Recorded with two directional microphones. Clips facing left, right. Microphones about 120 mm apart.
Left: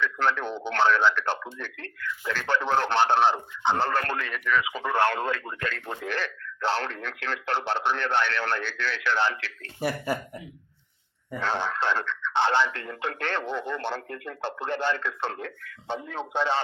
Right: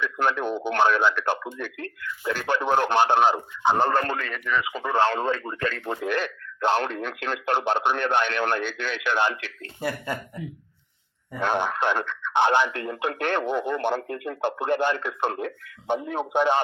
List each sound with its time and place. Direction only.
0.0 s speech: 15° right (ahead or behind)
4.2 s speech: centre (ahead or behind)
4.8 s speech: 15° right (ahead or behind)
11.3 s speech: 15° right (ahead or behind)